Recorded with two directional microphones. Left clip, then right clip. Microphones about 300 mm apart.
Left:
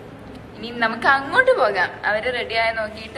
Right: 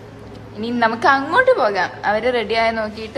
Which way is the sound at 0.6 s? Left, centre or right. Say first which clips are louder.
Right 4 dB; centre.